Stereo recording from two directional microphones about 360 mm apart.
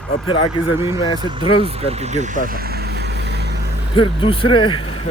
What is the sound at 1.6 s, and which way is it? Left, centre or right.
Vehicle, centre.